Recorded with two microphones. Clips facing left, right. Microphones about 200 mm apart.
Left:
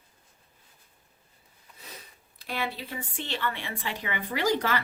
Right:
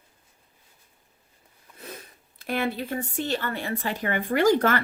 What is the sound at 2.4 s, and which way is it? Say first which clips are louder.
Speech: right 6 dB; 50° right (ahead or behind).